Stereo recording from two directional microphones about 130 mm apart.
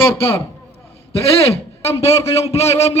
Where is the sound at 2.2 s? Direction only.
50° left (ahead or behind).